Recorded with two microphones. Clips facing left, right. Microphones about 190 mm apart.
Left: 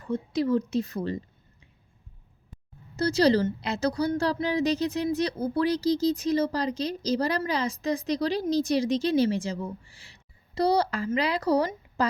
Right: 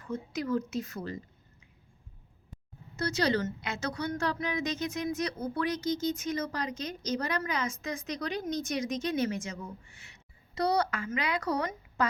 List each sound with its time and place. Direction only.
0.0 s a woman's voice: 30° left (ahead or behind)
2.9 s a woman's voice: 35° left (ahead or behind)